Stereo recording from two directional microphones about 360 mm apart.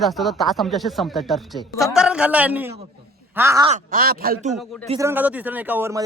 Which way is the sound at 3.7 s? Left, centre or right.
Right.